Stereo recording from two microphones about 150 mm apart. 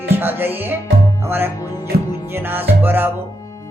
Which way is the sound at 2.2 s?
15° right (ahead or behind).